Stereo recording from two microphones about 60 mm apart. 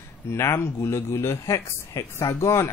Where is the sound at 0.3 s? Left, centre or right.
Left.